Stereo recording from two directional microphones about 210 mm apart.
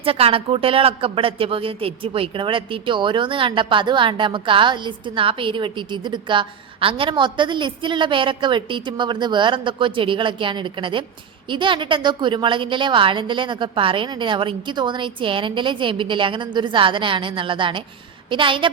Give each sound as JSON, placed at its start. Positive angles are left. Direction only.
{"t": 0.0, "sound": "speech", "side_deg": -25}